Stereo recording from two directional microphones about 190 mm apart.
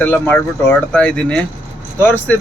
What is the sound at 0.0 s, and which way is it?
Speech, 10° left (ahead or behind).